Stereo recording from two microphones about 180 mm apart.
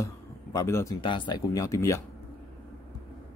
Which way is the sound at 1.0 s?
25° left (ahead or behind).